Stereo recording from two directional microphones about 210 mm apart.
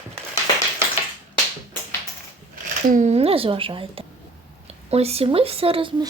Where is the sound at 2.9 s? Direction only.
35° right (ahead or behind).